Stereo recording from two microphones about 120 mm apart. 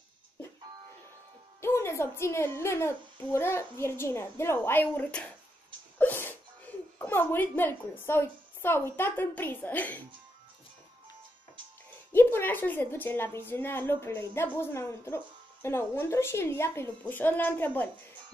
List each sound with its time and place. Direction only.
1.6 s a woman's voice: 20° left (ahead or behind)
12.1 s a woman's voice: 20° left (ahead or behind)